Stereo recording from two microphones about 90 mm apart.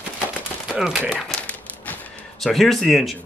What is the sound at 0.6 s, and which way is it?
Speech, 5° right (ahead or behind).